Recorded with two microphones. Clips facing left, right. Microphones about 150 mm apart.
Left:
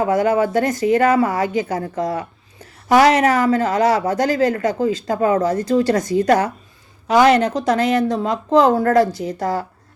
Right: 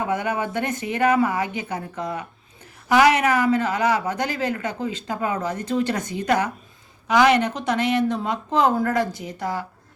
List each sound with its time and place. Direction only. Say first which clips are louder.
0.0 s speech: left 8 dB; 40° left (ahead or behind)